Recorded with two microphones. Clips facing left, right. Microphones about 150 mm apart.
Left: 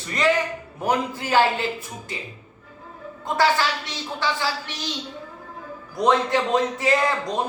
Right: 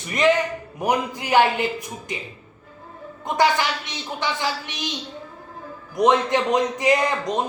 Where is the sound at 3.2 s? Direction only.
20° right (ahead or behind).